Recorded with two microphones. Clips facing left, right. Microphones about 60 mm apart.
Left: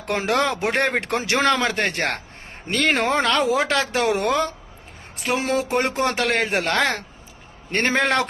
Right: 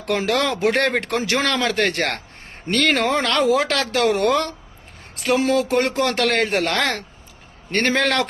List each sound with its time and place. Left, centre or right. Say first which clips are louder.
0.0 s a man's voice: right 1 dB; left
0.7 s speech: right 2 dB; centre
1.1 s a man's voice: left 1 dB; left
2.6 s speech: right 2 dB; centre
2.9 s a man's voice: left 2 dB; left; by 4.5 s centre
5.4 s a man's voice: right 2 dB; left